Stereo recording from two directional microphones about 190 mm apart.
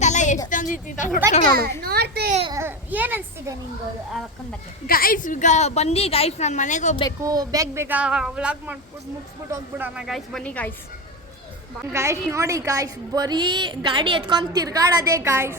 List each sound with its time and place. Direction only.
0.0 s a sound: 40° left (ahead or behind)
0.5 s a woman's voice: 45° left (ahead or behind)
1.8 s a sound: 55° right (ahead or behind)
2.5 s a child's voice: 15° right (ahead or behind)
4.9 s a woman's voice: 50° left (ahead or behind)
7.2 s speech: 20° right (ahead or behind); by 10.7 s 5° left (ahead or behind)
11.8 s a woman's voice: 15° right (ahead or behind)